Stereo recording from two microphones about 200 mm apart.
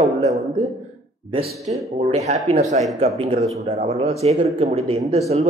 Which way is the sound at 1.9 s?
30° right (ahead or behind).